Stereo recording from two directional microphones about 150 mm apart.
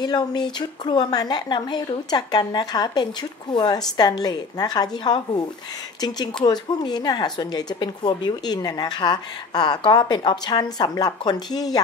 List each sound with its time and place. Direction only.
0.0 s a woman's voice: 25° left (ahead or behind)